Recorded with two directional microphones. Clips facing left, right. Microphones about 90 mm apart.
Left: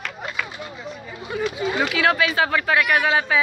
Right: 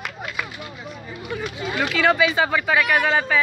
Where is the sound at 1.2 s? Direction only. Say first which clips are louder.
Left 4 dB; 25° left (ahead or behind).